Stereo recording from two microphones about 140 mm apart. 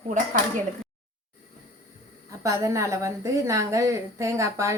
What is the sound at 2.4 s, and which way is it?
A woman's voice, 20° right (ahead or behind).